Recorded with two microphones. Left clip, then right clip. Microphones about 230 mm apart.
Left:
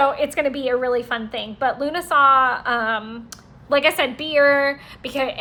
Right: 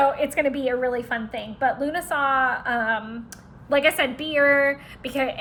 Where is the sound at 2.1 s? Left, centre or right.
Centre.